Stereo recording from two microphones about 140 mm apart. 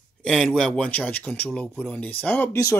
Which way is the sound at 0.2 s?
5° left (ahead or behind).